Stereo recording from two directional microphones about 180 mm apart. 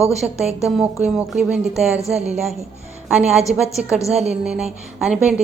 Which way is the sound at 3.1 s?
5° right (ahead or behind).